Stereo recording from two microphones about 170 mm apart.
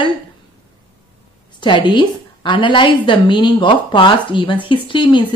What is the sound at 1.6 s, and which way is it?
Speech, 30° left (ahead or behind).